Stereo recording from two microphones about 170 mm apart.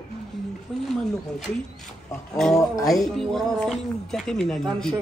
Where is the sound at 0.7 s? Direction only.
Centre (ahead or behind).